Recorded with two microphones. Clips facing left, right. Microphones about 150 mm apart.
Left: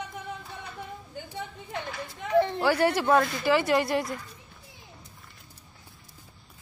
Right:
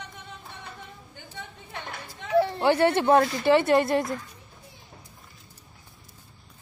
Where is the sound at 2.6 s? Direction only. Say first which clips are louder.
Right 3 dB; 25° right (ahead or behind).